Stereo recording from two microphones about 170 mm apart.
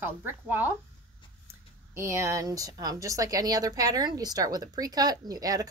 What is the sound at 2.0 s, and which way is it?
A woman's voice, 15° right (ahead or behind).